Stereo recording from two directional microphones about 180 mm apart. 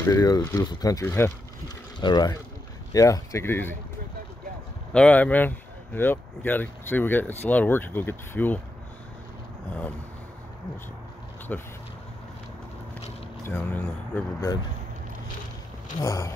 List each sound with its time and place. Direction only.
0.0 s speech: 20° left (ahead or behind)
4.9 s speech: 5° left (ahead or behind)
11.5 s speech: 5° left (ahead or behind)
13.5 s speech: 10° left (ahead or behind)
16.0 s speech: 20° left (ahead or behind)